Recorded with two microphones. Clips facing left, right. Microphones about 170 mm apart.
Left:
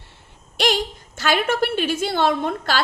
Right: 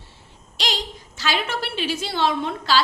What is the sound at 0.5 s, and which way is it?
A woman's voice, 55° left (ahead or behind).